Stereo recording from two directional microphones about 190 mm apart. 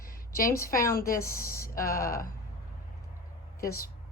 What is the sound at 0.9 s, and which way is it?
Speech, 50° left (ahead or behind).